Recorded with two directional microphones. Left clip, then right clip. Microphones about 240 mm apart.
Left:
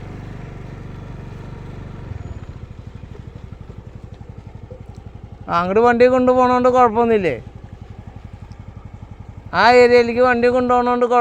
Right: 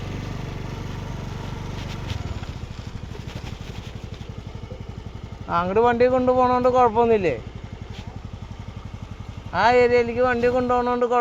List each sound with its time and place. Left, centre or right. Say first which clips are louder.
5.5 s a man's voice: left 5 dB; left
9.5 s a man's voice: left 6 dB; left